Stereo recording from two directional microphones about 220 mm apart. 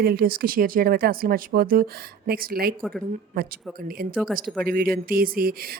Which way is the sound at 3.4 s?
45° right (ahead or behind).